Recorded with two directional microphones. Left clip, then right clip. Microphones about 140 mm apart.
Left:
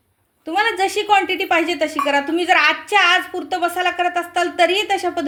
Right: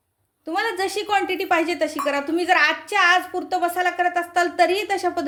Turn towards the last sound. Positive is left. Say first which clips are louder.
# left 3 dB
turn(degrees=10)  # may be behind; listen again after turning